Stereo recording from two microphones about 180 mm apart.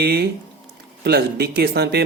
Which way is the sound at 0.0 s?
60° right (ahead or behind).